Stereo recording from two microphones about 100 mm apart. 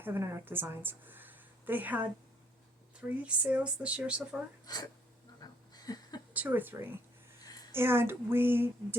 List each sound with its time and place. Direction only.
0.0 s a woman's voice: 25° right (ahead or behind)
3.1 s speech: 10° right (ahead or behind)
4.6 s speech: 45° left (ahead or behind)
5.4 s a sound: 40° left (ahead or behind)
6.3 s speech: 20° right (ahead or behind)